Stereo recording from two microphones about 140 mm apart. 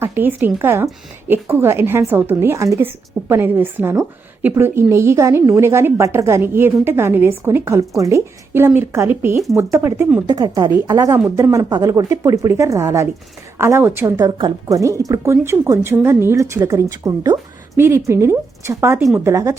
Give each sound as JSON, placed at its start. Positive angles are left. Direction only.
{"t": 0.0, "sound": "a woman's voice", "side_deg": -15}
{"t": 10.2, "sound": "a woman's voice", "side_deg": -30}
{"t": 14.2, "sound": "speech", "side_deg": -30}